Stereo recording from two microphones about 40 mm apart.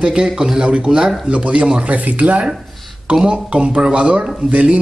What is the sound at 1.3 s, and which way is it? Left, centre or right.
Speech, right.